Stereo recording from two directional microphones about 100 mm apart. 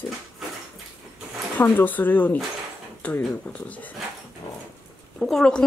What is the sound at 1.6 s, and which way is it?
Speech, 20° left (ahead or behind).